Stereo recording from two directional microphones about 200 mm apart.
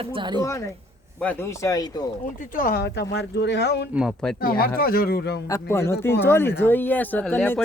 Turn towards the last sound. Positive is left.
turn(degrees=10)  # may be behind; listen again after turning